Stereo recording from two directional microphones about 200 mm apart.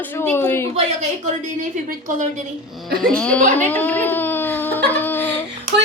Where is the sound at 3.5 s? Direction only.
10° left (ahead or behind).